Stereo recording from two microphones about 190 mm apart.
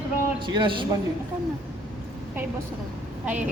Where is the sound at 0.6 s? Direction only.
25° right (ahead or behind).